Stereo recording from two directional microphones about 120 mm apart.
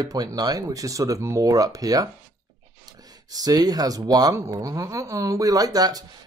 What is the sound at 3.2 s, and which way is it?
Speech, 30° right (ahead or behind).